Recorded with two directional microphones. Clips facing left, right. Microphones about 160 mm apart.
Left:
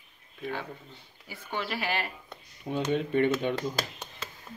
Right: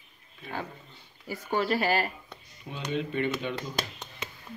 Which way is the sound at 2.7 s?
50° left (ahead or behind).